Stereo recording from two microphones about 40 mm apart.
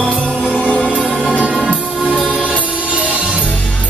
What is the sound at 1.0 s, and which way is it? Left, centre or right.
Music, right.